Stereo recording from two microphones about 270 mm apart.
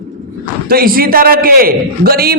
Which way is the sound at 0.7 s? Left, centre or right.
Right.